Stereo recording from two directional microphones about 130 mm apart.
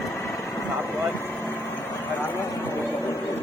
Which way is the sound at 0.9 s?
15° left (ahead or behind).